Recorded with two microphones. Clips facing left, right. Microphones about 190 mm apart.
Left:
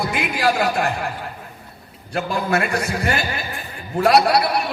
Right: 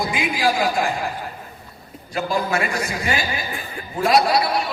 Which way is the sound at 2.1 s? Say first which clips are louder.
Left 1 dB; 60° left (ahead or behind).